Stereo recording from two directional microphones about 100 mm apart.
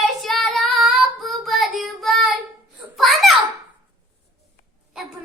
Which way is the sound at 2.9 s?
Centre (ahead or behind).